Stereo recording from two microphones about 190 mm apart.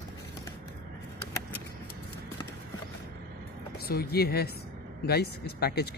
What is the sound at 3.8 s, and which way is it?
Speech, 55° left (ahead or behind).